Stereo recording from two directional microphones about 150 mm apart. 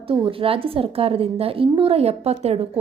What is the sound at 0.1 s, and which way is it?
A woman's voice, 35° right (ahead or behind).